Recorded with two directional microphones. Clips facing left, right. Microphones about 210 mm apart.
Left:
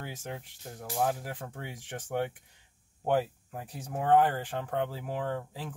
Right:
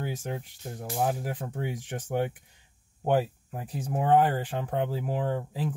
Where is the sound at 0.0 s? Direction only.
15° right (ahead or behind).